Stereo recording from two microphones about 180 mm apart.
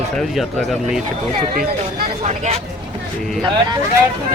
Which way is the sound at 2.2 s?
35° right (ahead or behind).